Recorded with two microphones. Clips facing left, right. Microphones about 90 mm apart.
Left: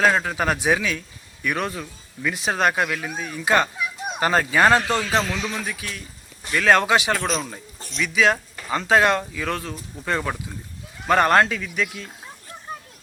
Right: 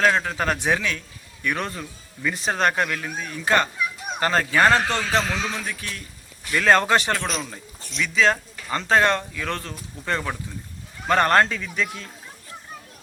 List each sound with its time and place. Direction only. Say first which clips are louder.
0.0 s a man's voice: left 1 dB; 5° left (ahead or behind)
5.2 s a man's voice: even; 35° right (ahead or behind)
5.6 s a man's voice: left 1 dB; 5° left (ahead or behind)